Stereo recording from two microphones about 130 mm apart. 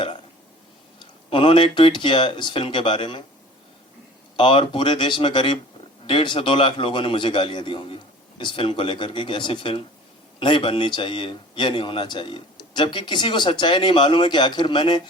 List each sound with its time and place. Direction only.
0.9 s a man's voice: 40° left (ahead or behind)
4.4 s a man's voice: 40° left (ahead or behind)